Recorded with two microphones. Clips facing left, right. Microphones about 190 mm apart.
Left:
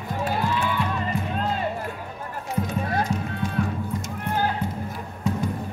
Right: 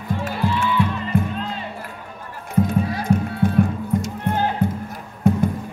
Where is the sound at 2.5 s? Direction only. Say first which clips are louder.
Right 6 dB; 55° right (ahead or behind).